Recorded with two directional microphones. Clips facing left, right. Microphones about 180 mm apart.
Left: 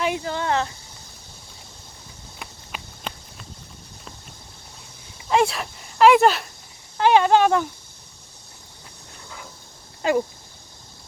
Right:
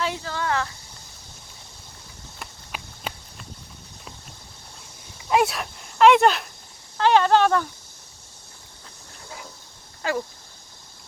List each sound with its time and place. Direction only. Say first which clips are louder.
0.0 s a sound: left 3 dB; 15° left (ahead or behind)
2.4 s walk: even; centre (ahead or behind)
5.3 s speech: left 1 dB; centre (ahead or behind)
6.9 s speech: left 1 dB; 15° left (ahead or behind)
10.0 s speech: left 6 dB; 20° left (ahead or behind)